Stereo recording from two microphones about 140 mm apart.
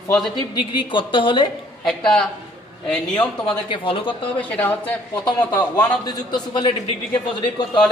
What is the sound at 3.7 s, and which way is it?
Speech, 40° left (ahead or behind).